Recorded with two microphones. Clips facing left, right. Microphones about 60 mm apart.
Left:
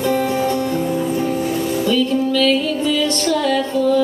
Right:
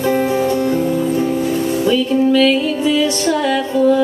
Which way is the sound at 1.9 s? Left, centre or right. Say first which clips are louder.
Right 4 dB; centre.